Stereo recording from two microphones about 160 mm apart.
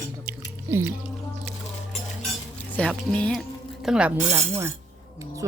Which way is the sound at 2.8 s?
10° left (ahead or behind).